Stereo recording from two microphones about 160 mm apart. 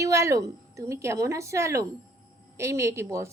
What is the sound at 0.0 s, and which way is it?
A woman's voice, 20° right (ahead or behind).